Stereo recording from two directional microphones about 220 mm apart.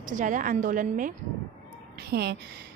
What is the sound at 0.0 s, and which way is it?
Speech, 35° right (ahead or behind).